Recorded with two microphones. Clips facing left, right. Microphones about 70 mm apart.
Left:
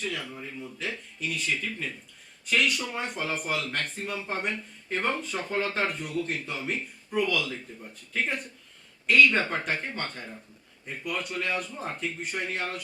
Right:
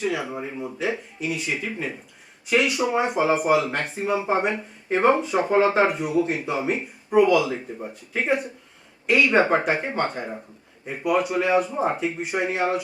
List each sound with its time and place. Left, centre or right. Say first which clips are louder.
0.0 s speech: right 8 dB; centre
7.7 s speech: right 10 dB; right
8.1 s speech: right 7 dB; centre